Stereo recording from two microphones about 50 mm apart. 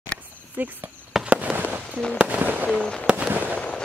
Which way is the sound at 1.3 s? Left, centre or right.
Right.